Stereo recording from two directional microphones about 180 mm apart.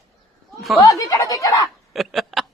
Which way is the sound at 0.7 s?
20° left (ahead or behind).